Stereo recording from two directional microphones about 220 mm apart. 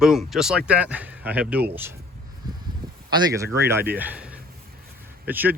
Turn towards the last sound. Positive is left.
turn(degrees=-10)  # may be behind; listen again after turning